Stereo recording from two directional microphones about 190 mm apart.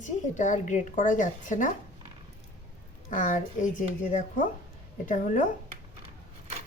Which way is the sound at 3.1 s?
45° left (ahead or behind).